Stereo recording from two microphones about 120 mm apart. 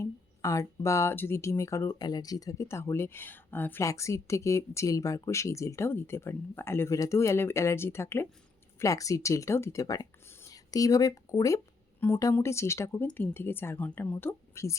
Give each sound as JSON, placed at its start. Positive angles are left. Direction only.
{"t": 0.0, "sound": "a woman's voice", "side_deg": 25}